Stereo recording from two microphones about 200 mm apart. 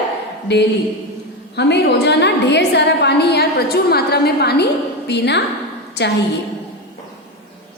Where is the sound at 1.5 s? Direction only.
55° left (ahead or behind).